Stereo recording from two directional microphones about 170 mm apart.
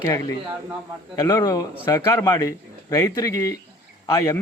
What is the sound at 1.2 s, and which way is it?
A man's voice, 20° left (ahead or behind).